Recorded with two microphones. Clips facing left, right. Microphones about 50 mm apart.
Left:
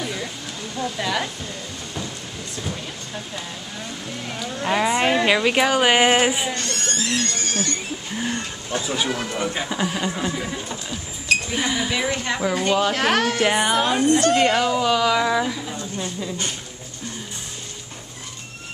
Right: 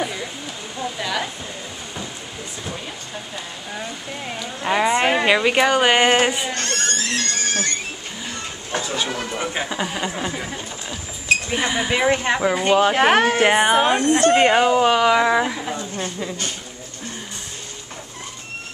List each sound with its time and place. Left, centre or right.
0.0 s a sound: centre
0.7 s speech: centre
3.7 s speech: centre
6.5 s speech: right
8.2 s a sound: left
8.8 s speech: centre
9.4 s speech: centre
14.1 s speech: right